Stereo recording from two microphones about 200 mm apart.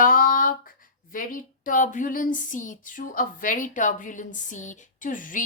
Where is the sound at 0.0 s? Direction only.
45° left (ahead or behind).